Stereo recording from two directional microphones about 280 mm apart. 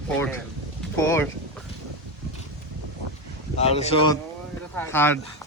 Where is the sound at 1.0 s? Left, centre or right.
Centre.